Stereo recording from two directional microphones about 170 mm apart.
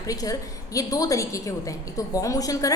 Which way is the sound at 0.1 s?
20° left (ahead or behind).